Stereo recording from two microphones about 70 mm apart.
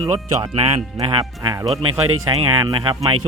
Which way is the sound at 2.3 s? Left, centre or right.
Right.